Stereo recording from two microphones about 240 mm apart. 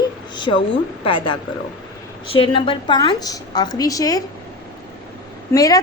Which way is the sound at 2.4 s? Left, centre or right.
Left.